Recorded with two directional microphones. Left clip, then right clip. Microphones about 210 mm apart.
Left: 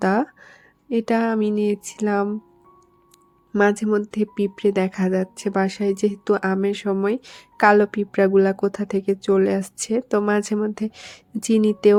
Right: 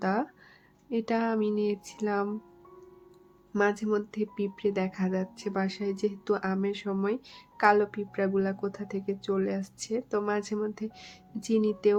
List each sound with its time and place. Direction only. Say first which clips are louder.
0.0 s speech: left 9 dB; 35° left (ahead or behind)
3.6 s speech: left 8 dB; 35° left (ahead or behind)